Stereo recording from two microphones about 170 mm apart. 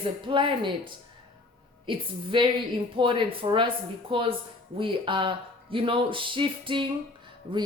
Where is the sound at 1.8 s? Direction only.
30° right (ahead or behind).